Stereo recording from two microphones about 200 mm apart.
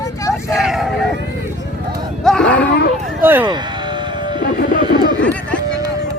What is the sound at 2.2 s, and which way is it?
Cattle, 5° left (ahead or behind).